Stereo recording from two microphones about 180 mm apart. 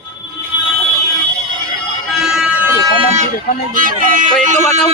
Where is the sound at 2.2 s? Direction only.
5° right (ahead or behind).